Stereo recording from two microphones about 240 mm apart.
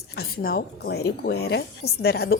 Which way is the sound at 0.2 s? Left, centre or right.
Left.